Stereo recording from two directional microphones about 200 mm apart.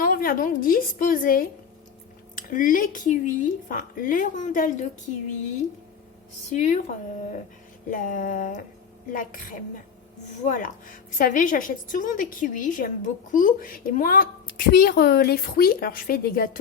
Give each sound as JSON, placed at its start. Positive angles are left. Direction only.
{"t": 0.0, "sound": "a woman's voice", "side_deg": 45}
{"t": 6.5, "sound": "speech", "side_deg": 35}
{"t": 7.9, "sound": "a woman's voice", "side_deg": 40}